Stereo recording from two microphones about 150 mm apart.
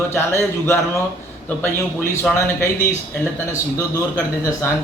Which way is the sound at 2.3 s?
20° left (ahead or behind).